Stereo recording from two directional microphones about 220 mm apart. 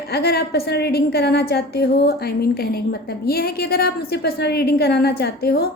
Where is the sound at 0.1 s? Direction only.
45° left (ahead or behind).